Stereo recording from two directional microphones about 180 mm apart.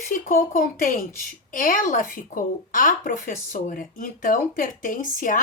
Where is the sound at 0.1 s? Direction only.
50° left (ahead or behind).